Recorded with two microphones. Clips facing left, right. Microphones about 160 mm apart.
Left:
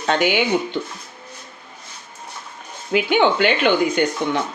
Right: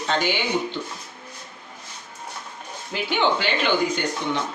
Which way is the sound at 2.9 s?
60° left (ahead or behind).